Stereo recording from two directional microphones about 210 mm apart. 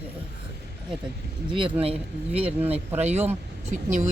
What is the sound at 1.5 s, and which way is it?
Speech, 25° right (ahead or behind).